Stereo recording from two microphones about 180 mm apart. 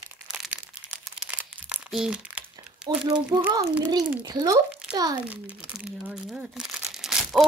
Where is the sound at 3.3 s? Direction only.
20° right (ahead or behind).